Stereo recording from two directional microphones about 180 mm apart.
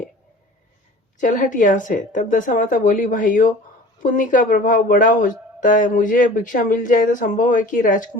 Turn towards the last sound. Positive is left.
turn(degrees=45)  # may be behind; listen again after turning